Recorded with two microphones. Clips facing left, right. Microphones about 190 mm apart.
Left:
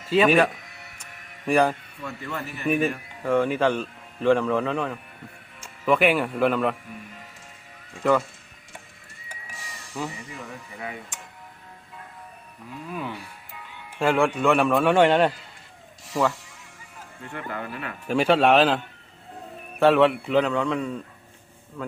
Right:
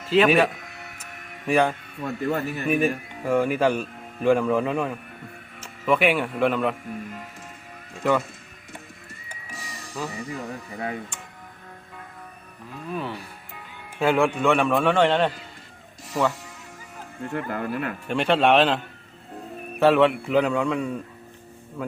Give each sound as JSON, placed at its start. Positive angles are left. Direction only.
{"t": 0.3, "sound": "a man's voice", "side_deg": 0}
{"t": 2.0, "sound": "speech", "side_deg": -40}
{"t": 2.6, "sound": "a man's voice", "side_deg": -10}
{"t": 10.2, "sound": "speech", "side_deg": -35}
{"t": 12.9, "sound": "a man's voice", "side_deg": 5}
{"t": 17.2, "sound": "speech", "side_deg": -40}
{"t": 18.1, "sound": "a man's voice", "side_deg": 5}
{"t": 19.8, "sound": "a man's voice", "side_deg": 0}